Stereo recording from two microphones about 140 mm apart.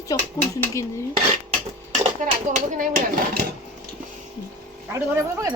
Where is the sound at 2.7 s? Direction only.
70° right (ahead or behind).